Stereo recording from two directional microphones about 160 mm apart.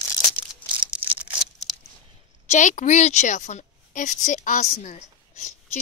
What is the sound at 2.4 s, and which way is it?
A woman's voice, 50° left (ahead or behind).